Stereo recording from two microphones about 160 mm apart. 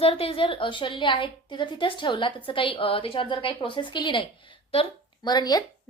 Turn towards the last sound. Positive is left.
turn(degrees=25)  # may be behind; listen again after turning